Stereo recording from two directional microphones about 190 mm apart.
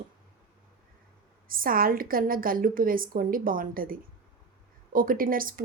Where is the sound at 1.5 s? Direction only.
50° right (ahead or behind).